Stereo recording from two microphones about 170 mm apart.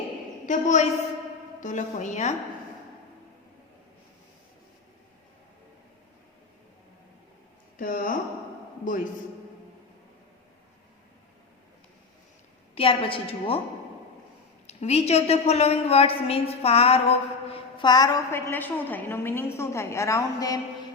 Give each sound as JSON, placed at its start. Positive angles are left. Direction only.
{"t": 0.4, "sound": "a woman's voice", "side_deg": 45}
{"t": 7.8, "sound": "speech", "side_deg": 55}
{"t": 12.7, "sound": "a woman's voice", "side_deg": 35}
{"t": 14.7, "sound": "a woman's voice", "side_deg": 40}